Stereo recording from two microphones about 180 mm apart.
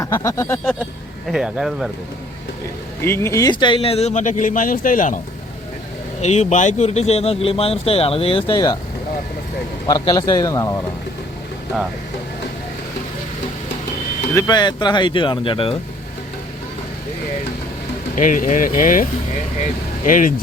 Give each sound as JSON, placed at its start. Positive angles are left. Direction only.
{"t": 0.0, "sound": "a sound", "side_deg": 15}
{"t": 1.3, "sound": "speech", "side_deg": -5}
{"t": 3.0, "sound": "speech", "side_deg": 15}
{"t": 6.2, "sound": "speech", "side_deg": 40}
{"t": 9.8, "sound": "speech", "side_deg": 20}
{"t": 14.3, "sound": "speech", "side_deg": 20}
{"t": 18.1, "sound": "speech", "side_deg": 45}
{"t": 20.1, "sound": "speech", "side_deg": 45}